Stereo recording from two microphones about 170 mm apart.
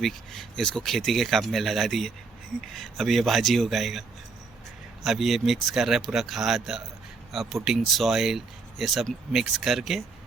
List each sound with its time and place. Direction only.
0.0 s speech: centre (ahead or behind)
5.0 s speech: centre (ahead or behind)